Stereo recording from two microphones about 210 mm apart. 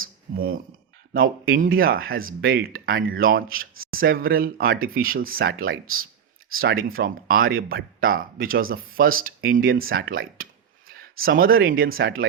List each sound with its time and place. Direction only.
0.3 s speech: 45° right (ahead or behind)
6.8 s speech: 45° right (ahead or behind)